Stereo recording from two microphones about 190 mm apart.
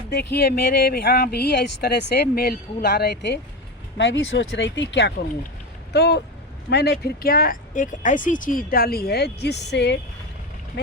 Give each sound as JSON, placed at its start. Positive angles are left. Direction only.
{"t": 0.1, "sound": "speech", "side_deg": 60}
{"t": 3.9, "sound": "speech", "side_deg": 75}